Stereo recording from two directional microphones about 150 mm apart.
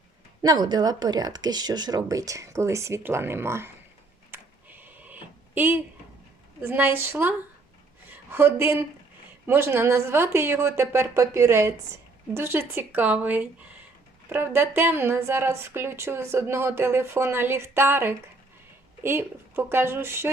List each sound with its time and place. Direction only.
0.4 s speech: 30° right (ahead or behind)
4.3 s a sound: 15° right (ahead or behind)
6.6 s a woman's voice: 15° right (ahead or behind)